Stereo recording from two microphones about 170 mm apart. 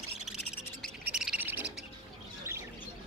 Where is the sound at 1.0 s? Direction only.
5° right (ahead or behind).